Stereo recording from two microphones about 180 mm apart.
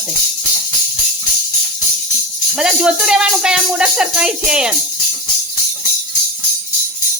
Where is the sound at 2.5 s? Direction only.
5° right (ahead or behind).